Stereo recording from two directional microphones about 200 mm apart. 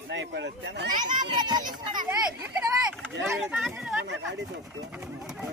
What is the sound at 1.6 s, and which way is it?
Speech, 40° right (ahead or behind).